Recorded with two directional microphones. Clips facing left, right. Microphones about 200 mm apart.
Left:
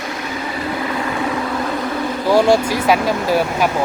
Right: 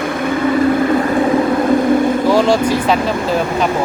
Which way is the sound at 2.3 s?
10° left (ahead or behind).